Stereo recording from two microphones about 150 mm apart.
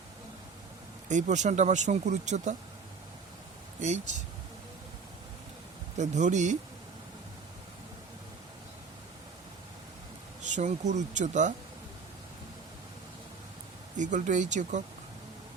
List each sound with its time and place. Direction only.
1.0 s speech: 55° right (ahead or behind)
3.8 s speech: 50° right (ahead or behind)
6.0 s speech: 55° right (ahead or behind)
10.4 s speech: 55° right (ahead or behind)
13.9 s speech: 55° right (ahead or behind)